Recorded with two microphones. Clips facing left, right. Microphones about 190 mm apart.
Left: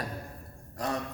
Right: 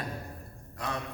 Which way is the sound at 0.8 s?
40° left (ahead or behind).